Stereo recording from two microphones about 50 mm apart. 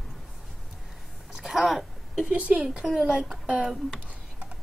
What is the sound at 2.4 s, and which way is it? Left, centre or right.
Speech, right.